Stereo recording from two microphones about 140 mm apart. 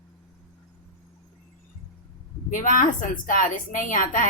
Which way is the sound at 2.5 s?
65° left (ahead or behind).